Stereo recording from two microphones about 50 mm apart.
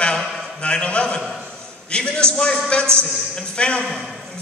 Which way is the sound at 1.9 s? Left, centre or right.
Centre.